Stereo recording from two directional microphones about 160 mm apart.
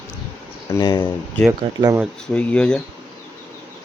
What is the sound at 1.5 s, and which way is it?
Speech, 20° right (ahead or behind).